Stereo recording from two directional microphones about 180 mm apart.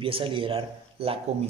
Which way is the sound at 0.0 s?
30° right (ahead or behind).